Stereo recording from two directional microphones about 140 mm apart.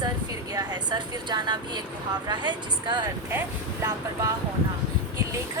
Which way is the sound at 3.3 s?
15° right (ahead or behind).